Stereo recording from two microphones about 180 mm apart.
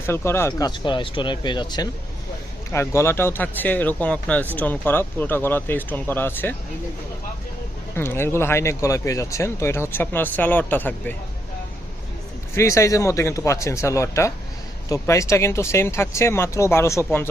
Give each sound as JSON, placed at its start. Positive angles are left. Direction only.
{"t": 0.0, "sound": "speech", "side_deg": 15}
{"t": 0.7, "sound": "speech", "side_deg": 25}
{"t": 7.9, "sound": "speech", "side_deg": 15}
{"t": 12.5, "sound": "speech", "side_deg": 15}